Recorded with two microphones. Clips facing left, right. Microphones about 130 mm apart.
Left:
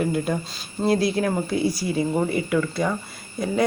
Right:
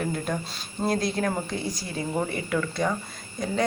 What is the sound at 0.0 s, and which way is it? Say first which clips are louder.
Speech: left 5 dB; 5° left (ahead or behind).